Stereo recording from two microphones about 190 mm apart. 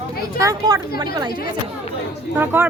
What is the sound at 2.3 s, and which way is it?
Speech, 10° right (ahead or behind).